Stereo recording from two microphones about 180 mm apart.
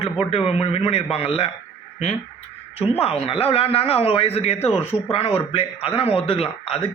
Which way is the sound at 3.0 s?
35° left (ahead or behind).